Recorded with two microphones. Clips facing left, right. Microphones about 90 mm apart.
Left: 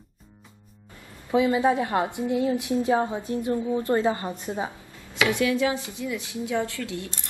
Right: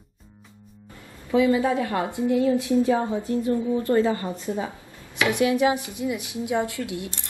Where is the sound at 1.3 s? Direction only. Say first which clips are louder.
Right 1 dB; 25° left (ahead or behind).